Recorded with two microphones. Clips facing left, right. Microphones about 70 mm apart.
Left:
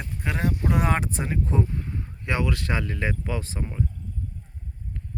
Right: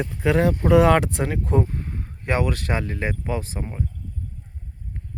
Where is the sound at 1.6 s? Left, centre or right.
Right.